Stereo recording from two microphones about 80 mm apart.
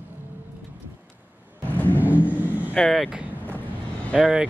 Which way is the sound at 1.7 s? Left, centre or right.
Left.